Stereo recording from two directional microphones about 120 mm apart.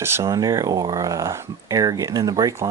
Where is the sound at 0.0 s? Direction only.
20° right (ahead or behind).